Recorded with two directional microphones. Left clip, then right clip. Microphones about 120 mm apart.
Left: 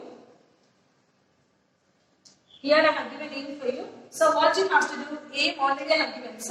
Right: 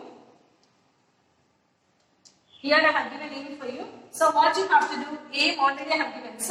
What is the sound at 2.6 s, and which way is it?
A woman's voice, 25° left (ahead or behind).